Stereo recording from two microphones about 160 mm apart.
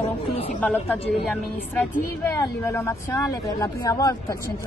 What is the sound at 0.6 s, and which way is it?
A woman's voice, 10° left (ahead or behind).